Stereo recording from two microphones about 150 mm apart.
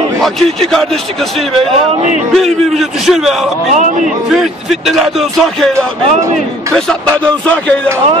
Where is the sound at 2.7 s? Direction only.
Centre (ahead or behind).